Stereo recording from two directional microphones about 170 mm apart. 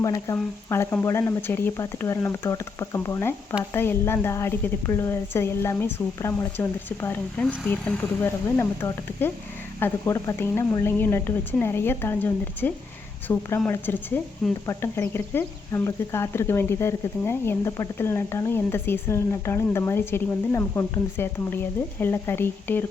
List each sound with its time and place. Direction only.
0.0 s speech: 20° left (ahead or behind)